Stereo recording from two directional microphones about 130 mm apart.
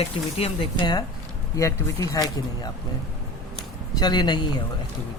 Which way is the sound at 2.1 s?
30° left (ahead or behind).